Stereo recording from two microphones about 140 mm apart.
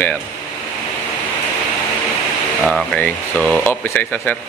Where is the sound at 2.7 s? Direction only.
10° left (ahead or behind).